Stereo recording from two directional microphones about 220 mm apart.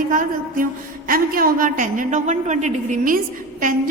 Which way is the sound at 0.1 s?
40° right (ahead or behind).